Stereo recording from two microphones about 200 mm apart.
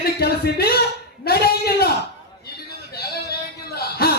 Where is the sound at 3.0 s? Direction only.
50° left (ahead or behind).